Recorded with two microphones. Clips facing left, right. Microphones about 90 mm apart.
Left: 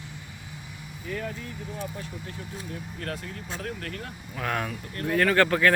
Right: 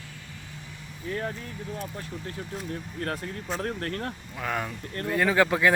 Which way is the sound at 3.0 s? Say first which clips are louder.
Right 4 dB; 40° right (ahead or behind).